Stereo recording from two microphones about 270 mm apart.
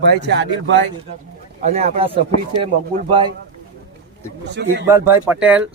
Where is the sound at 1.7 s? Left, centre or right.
Right.